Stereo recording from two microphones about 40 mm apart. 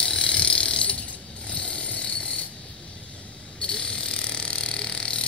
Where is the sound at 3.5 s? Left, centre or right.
Centre.